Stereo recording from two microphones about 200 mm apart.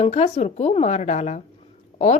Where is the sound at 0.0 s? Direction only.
35° left (ahead or behind).